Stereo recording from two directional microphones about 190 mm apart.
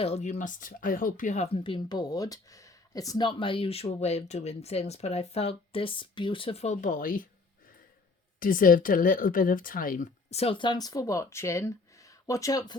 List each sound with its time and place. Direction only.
0.0 s speech: 35° left (ahead or behind)
1.5 s speech: 25° left (ahead or behind); by 7.3 s 45° left (ahead or behind)
8.4 s speech: 45° left (ahead or behind)
10.2 s speech: 30° left (ahead or behind)